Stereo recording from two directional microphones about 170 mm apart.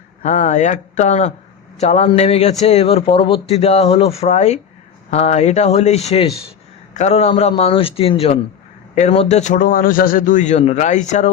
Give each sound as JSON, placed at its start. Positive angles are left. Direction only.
{"t": 0.2, "sound": "a man's voice", "side_deg": 45}